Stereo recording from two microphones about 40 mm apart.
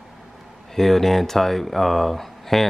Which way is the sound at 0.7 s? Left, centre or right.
Centre.